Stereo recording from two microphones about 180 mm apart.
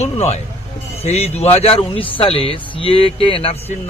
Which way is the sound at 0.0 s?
35° left (ahead or behind).